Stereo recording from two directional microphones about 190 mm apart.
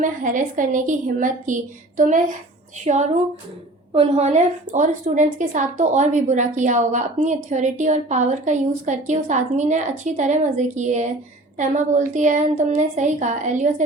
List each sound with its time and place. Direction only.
0.0 s a woman's voice: 45° right (ahead or behind)